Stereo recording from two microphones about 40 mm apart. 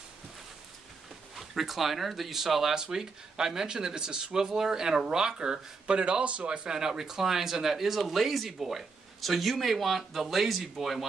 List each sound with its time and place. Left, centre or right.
1.3 s speech: centre; by 6.7 s right
6.7 s speech: centre